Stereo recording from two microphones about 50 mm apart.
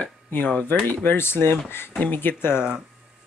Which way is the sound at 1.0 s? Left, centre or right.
Left.